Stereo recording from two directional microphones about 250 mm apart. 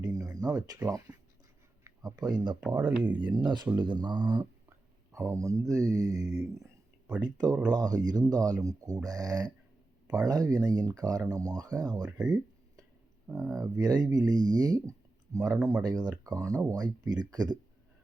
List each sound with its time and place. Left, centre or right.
0.0 s a sound: centre
1.8 s speech: centre
2.6 s speech: centre
3.2 s speech: centre